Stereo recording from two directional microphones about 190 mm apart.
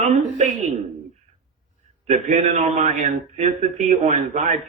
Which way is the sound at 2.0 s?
35° right (ahead or behind).